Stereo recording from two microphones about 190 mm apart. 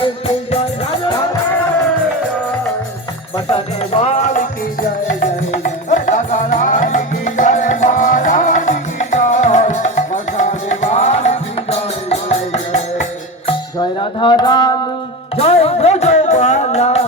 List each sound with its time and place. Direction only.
0.5 s music: 25° left (ahead or behind)
3.3 s music: 30° left (ahead or behind)
13.7 s a sound: 25° left (ahead or behind)
15.4 s music: 30° left (ahead or behind)